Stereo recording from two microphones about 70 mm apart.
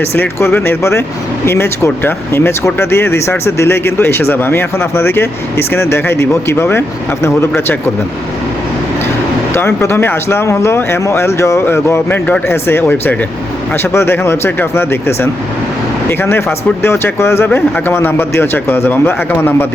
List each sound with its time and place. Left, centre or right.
0.0 s speech: left
9.5 s speech: left